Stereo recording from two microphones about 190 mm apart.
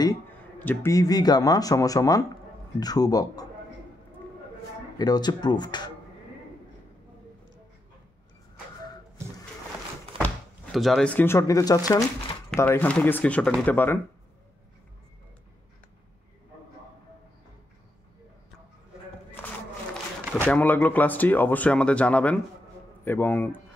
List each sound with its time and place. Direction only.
0.6 s speech: 10° left (ahead or behind)
4.9 s speech: 20° left (ahead or behind)
10.2 s speech: centre (ahead or behind)
20.4 s speech: 5° left (ahead or behind)